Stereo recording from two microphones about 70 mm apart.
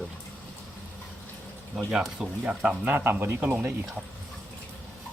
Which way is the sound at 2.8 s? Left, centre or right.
Right.